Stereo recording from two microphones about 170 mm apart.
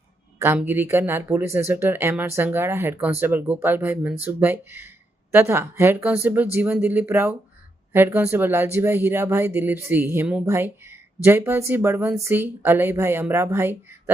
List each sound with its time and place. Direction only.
0.3 s speech: 15° right (ahead or behind)